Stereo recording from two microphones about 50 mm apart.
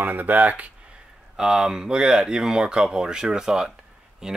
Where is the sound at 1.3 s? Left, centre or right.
Centre.